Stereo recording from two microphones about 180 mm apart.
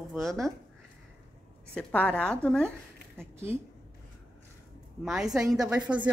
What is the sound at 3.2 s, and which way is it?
Speech, 15° right (ahead or behind).